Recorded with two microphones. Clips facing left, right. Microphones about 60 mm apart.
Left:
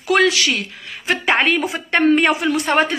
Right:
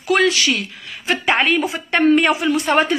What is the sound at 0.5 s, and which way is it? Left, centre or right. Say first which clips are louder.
A woman's voice: even; left.